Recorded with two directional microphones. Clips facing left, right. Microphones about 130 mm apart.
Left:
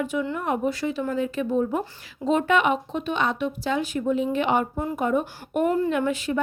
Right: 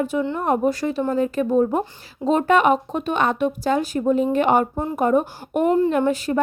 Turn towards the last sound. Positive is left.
turn(degrees=-40)  # may be behind; listen again after turning